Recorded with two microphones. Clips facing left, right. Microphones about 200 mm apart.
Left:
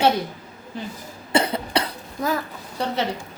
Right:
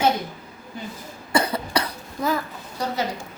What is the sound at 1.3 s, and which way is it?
Cough, 25° left (ahead or behind).